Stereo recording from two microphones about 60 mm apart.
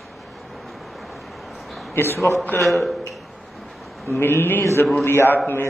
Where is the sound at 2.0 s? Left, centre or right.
Left.